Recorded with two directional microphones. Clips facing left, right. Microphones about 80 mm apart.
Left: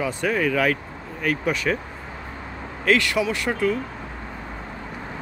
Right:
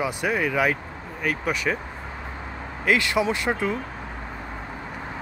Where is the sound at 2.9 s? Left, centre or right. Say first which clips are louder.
Left 1 dB; right.